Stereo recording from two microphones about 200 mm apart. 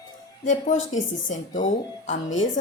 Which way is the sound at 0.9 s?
40° left (ahead or behind).